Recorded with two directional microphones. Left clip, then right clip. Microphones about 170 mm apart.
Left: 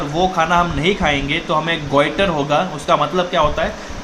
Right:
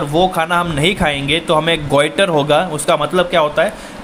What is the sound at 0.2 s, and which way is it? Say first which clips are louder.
Speech: even; 60° right (ahead or behind).